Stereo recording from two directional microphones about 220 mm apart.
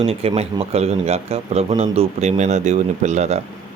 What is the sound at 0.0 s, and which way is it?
A man's voice, 25° right (ahead or behind).